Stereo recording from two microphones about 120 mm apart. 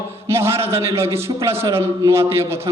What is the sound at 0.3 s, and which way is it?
A man's voice, 20° right (ahead or behind).